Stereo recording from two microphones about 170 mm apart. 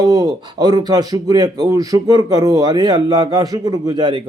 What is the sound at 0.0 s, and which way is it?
A man's voice, 25° right (ahead or behind).